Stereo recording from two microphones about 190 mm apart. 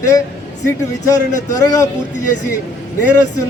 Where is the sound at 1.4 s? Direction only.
15° left (ahead or behind).